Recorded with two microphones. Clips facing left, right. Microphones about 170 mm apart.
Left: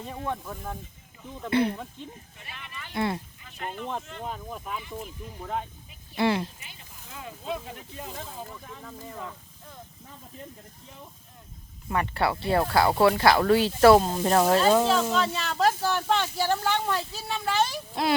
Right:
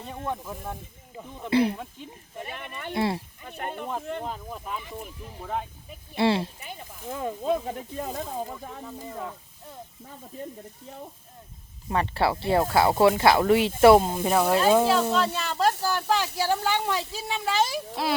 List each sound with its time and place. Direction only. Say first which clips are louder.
0.0 s speech: even; centre (ahead or behind)
1.5 s speech: right 2 dB; 30° right (ahead or behind)
1.7 s speech: even; 10° right (ahead or behind)
2.3 s speech: right 8 dB; 50° right (ahead or behind)
2.9 s speech: right 2 dB; 30° right (ahead or behind)
3.4 s speech: right 4 dB; 55° right (ahead or behind)
4.3 s speech: right 1 dB; centre (ahead or behind)
6.1 s speech: right 2 dB; 25° right (ahead or behind)
6.7 s speech: right 12 dB; 45° right (ahead or behind)
8.8 s speech: right 3 dB; 15° right (ahead or behind)
11.9 s speech: right 2 dB; 25° right (ahead or behind)
14.1 s speech: left 1 dB; 10° right (ahead or behind)